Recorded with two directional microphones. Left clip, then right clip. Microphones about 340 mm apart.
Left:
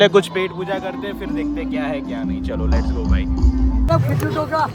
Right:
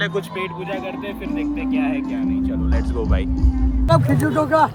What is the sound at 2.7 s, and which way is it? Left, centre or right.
Speech, centre.